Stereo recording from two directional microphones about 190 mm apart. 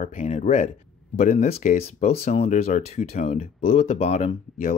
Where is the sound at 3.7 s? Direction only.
35° left (ahead or behind).